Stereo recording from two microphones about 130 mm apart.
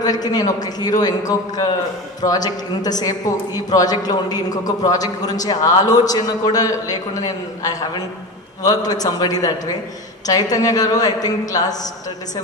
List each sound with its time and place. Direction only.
0.0 s a man's voice: 30° left (ahead or behind)